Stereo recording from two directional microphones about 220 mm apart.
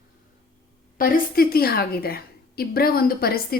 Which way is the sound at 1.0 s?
40° left (ahead or behind).